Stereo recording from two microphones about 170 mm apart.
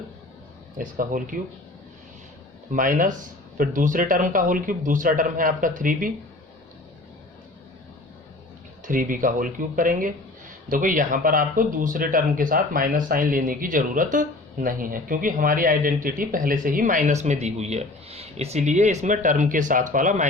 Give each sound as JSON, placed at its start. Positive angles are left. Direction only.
{"t": 0.8, "sound": "speech", "side_deg": -55}
{"t": 2.7, "sound": "speech", "side_deg": -50}
{"t": 8.8, "sound": "speech", "side_deg": -50}